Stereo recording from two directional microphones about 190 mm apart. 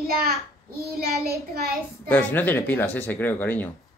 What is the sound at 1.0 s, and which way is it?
Child singing, 55° right (ahead or behind).